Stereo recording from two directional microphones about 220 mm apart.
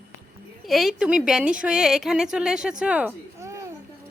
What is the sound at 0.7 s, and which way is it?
A woman's voice, centre (ahead or behind).